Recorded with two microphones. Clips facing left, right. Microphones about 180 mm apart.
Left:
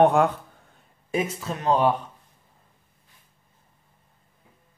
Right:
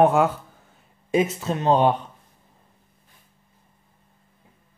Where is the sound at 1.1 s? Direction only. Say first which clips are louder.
Right 5 dB; 25° right (ahead or behind).